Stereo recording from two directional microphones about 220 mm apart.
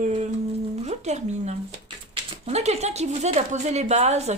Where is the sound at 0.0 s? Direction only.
30° right (ahead or behind).